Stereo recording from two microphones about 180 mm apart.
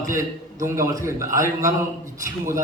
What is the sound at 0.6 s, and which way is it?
A man's voice, 15° right (ahead or behind).